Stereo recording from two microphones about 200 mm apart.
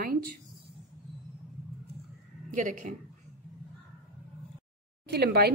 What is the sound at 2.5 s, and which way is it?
Speech, 40° right (ahead or behind).